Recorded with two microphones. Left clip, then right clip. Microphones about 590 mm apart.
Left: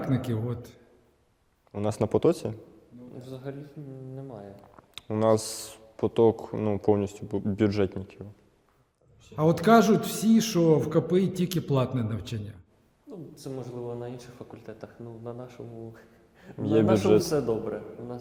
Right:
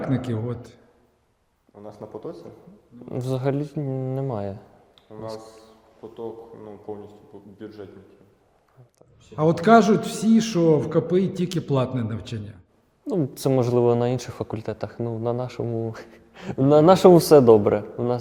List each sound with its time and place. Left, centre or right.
0.0 s a man's voice: centre
1.7 s speech: left
3.2 s speech: right
4.9 s ratchet: left
6.0 s speech: left
9.3 s a man's voice: centre
13.1 s speech: right
14.3 s speech: right